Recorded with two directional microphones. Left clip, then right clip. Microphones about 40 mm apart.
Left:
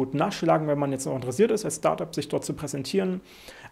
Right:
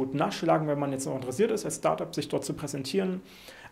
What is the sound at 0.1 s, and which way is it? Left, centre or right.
Speech, left.